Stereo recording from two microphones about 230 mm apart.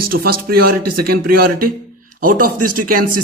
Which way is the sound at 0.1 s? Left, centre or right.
Right.